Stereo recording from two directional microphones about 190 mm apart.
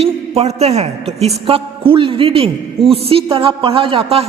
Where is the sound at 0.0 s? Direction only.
35° right (ahead or behind).